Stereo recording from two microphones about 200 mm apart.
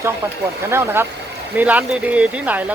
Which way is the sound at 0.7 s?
10° right (ahead or behind).